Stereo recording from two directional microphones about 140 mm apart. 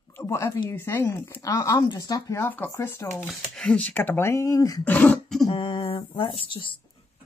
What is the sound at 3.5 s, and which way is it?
Speech, 5° left (ahead or behind).